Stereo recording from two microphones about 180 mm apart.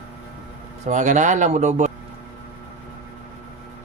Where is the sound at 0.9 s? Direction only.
40° right (ahead or behind).